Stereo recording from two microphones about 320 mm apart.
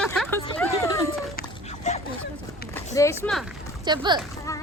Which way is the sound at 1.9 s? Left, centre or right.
Left.